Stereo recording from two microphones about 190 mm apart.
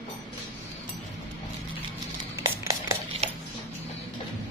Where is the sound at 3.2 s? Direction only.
35° right (ahead or behind).